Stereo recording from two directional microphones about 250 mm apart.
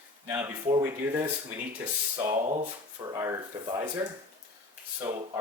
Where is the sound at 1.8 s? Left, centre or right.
Centre.